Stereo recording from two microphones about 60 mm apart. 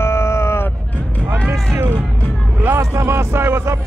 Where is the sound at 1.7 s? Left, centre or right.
Right.